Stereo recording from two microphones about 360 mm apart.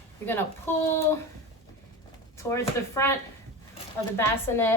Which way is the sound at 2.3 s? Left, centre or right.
Centre.